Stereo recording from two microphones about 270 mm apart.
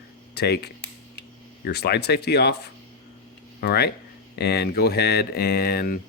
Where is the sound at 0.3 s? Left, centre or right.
Left.